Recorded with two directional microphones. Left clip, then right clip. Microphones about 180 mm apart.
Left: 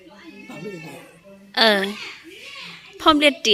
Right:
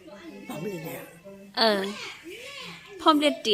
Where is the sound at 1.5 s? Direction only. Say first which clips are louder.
Left 6 dB; 25° left (ahead or behind).